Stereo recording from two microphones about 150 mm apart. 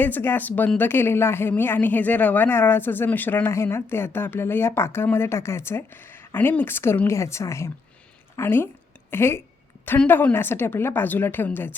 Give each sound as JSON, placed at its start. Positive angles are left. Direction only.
{"t": 0.0, "sound": "a woman's voice", "side_deg": 15}